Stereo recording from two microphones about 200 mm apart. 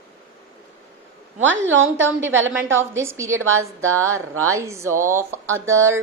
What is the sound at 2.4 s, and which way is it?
Speech, 10° right (ahead or behind).